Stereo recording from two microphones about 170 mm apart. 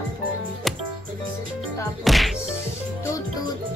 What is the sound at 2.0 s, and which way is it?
Music, centre (ahead or behind).